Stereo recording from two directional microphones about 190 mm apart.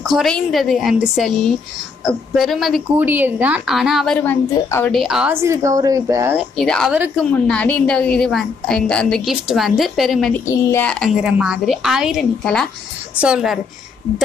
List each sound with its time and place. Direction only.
0.0 s a woman's voice: centre (ahead or behind)
4.9 s speech: centre (ahead or behind)
6.3 s a woman's voice: centre (ahead or behind)